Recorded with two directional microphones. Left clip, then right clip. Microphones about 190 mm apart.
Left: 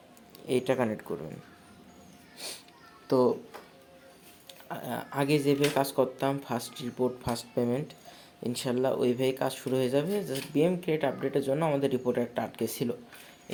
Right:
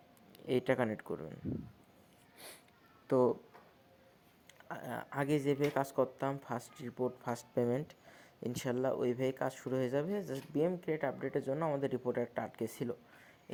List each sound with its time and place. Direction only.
0.3 s speech: 35° right (ahead or behind)
2.4 s a sound: 20° right (ahead or behind)
3.1 s speech: 35° right (ahead or behind)
4.7 s speech: 35° right (ahead or behind)